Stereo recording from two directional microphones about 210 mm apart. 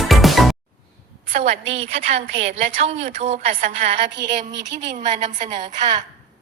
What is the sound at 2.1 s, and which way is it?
A woman's voice, 30° right (ahead or behind).